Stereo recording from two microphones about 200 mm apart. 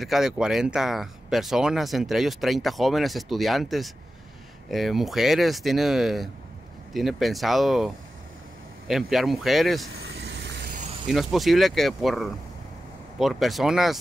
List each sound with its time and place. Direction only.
0.0 s speech: centre (ahead or behind)
9.9 s vehicle: 55° right (ahead or behind)
10.7 s a sound: 35° right (ahead or behind)
11.1 s speech: centre (ahead or behind)